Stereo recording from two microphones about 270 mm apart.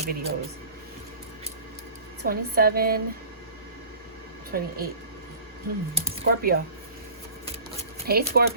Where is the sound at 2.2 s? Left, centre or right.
Right.